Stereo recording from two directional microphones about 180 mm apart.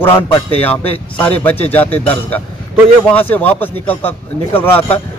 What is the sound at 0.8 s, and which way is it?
Speech, 35° left (ahead or behind).